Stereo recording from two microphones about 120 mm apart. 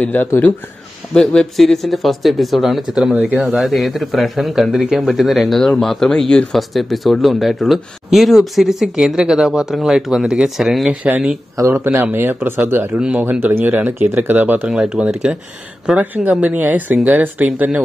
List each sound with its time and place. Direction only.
0.0 s speech: 15° left (ahead or behind); by 11.0 s centre (ahead or behind)
11.1 s a man's voice: 10° right (ahead or behind)